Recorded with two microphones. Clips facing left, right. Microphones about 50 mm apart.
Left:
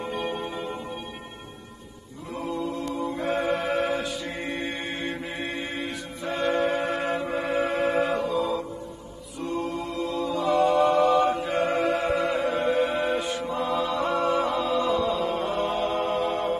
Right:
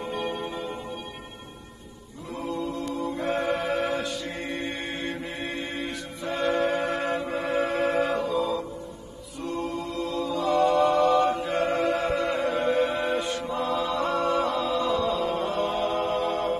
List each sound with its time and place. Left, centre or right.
0.4 s singing bowl: centre
2.3 s a capella: centre
3.2 s music: centre
4.6 s mantra: centre
9.6 s mantra: centre
9.8 s mantra: centre
10.4 s mantra: centre
11.6 s music: centre